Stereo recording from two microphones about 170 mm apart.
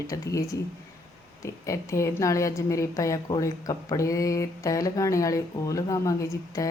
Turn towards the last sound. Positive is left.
turn(degrees=20)  # may be behind; listen again after turning